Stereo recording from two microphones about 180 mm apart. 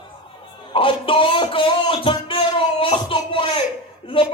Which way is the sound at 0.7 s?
30° left (ahead or behind).